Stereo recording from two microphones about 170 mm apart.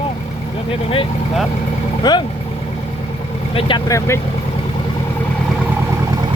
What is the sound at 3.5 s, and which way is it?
Speech, 30° left (ahead or behind).